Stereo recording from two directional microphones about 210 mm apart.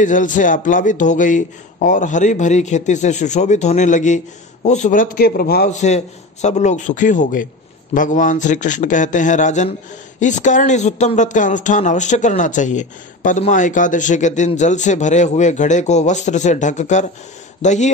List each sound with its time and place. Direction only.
0.0 s a man's voice: 40° left (ahead or behind)
5.8 s speech: 35° left (ahead or behind)